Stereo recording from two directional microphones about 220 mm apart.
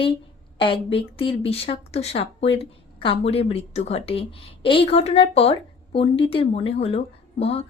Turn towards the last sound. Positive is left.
turn(degrees=25)  # may be behind; listen again after turning